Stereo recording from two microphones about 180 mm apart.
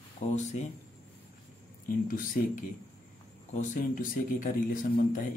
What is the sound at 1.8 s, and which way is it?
Speech, 50° left (ahead or behind).